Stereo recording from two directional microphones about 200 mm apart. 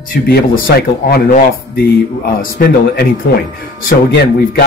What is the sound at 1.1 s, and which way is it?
Speech, 50° left (ahead or behind).